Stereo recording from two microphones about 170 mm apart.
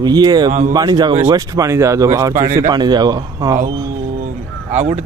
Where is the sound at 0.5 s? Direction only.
45° right (ahead or behind).